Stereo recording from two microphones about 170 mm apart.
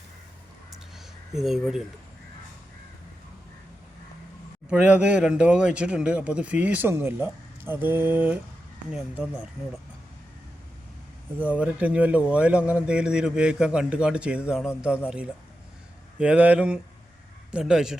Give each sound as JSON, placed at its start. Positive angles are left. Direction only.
{"t": 0.9, "sound": "a sound", "side_deg": 0}
{"t": 4.7, "sound": "a man's voice", "side_deg": -5}
{"t": 11.3, "sound": "a man's voice", "side_deg": -10}
{"t": 16.1, "sound": "a man's voice", "side_deg": -5}